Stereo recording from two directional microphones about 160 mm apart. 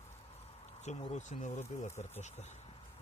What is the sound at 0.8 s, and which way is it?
Speech, 45° left (ahead or behind).